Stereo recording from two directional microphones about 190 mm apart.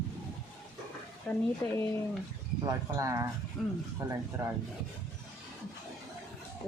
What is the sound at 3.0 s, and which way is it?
Speech, 15° right (ahead or behind).